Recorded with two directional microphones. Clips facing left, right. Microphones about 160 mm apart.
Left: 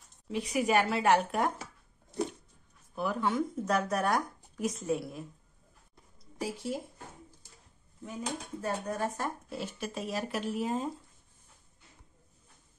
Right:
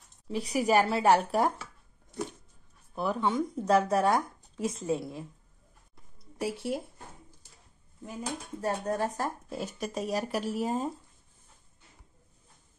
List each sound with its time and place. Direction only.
0.3 s speech: 35° right (ahead or behind)
3.0 s speech: 25° right (ahead or behind)
6.4 s speech: 65° right (ahead or behind)
8.5 s speech: 35° right (ahead or behind)